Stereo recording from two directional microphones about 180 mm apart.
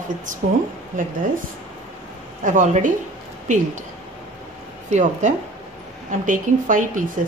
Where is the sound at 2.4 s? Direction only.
45° right (ahead or behind).